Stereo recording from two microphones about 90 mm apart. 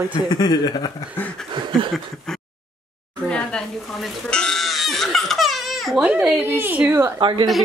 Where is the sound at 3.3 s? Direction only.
10° left (ahead or behind).